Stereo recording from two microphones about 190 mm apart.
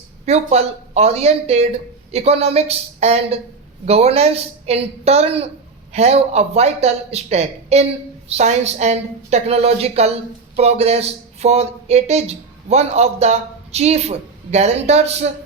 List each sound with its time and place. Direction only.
0.3 s a woman's voice: 35° right (ahead or behind)